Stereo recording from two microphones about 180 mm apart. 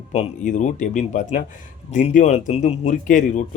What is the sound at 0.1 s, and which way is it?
Speech, 40° left (ahead or behind).